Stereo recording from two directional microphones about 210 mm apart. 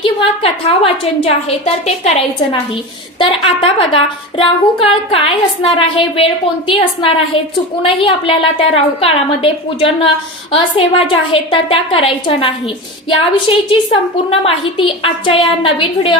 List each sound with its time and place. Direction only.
0.0 s a woman's voice: 25° left (ahead or behind)